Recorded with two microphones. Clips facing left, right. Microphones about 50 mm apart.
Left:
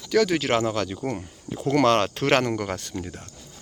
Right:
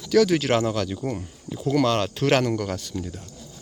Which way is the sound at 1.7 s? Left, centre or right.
Left.